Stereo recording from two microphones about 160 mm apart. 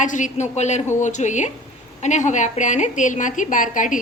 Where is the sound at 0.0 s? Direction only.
50° left (ahead or behind).